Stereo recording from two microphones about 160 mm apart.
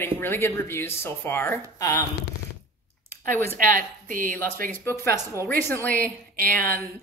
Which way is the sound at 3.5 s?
55° right (ahead or behind).